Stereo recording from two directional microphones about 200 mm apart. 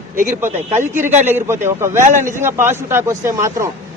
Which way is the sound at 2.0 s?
40° right (ahead or behind).